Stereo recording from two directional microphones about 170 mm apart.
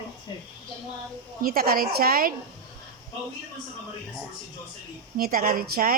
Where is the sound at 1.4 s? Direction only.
60° right (ahead or behind).